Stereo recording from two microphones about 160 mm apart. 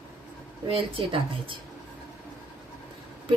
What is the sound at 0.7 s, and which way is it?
Speech, 35° right (ahead or behind).